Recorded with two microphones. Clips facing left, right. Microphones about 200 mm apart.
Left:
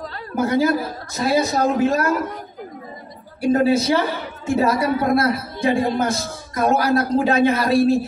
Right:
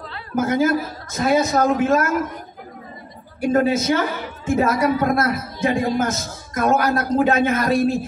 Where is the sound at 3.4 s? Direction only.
30° left (ahead or behind).